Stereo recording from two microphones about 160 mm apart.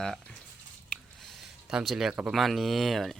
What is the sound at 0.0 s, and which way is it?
Speech, 5° left (ahead or behind).